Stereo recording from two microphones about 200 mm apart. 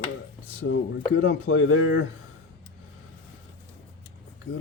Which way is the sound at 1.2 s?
60° left (ahead or behind).